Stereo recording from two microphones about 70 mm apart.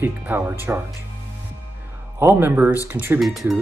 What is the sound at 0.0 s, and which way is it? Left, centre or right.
Speech, right.